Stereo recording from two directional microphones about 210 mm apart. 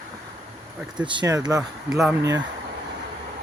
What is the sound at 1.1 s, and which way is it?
Speech, 20° right (ahead or behind).